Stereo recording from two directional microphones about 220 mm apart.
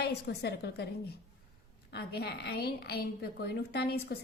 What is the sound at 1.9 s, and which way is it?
A woman's voice, 50° left (ahead or behind).